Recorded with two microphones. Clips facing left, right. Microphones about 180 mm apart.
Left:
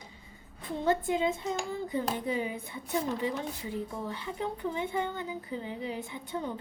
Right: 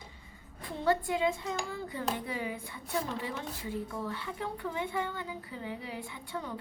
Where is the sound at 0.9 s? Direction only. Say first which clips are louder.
Left 1 dB; 20° left (ahead or behind).